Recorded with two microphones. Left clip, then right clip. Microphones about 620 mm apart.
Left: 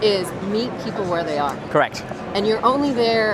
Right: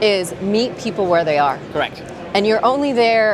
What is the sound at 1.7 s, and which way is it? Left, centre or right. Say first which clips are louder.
Speech: left 8 dB; left.